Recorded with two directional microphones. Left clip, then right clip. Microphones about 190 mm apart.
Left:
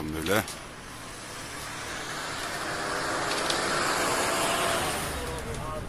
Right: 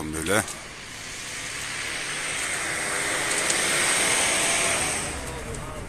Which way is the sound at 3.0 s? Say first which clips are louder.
Right 3 dB; 25° left (ahead or behind).